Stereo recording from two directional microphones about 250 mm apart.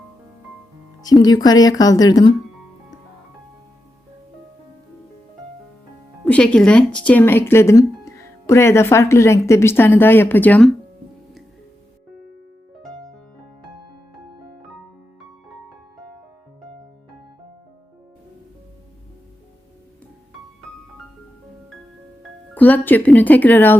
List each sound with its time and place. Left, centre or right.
1.0 s speech: centre
6.2 s speech: centre
22.5 s speech: centre